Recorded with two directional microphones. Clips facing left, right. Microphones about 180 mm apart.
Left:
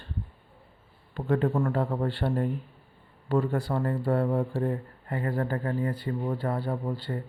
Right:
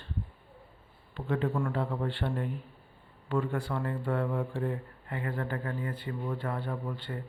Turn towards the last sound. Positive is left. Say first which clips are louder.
# left 5 dB
turn(degrees=35)  # may be behind; listen again after turning